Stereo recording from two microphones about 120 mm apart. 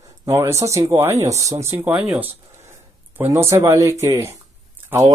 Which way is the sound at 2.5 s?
20° right (ahead or behind).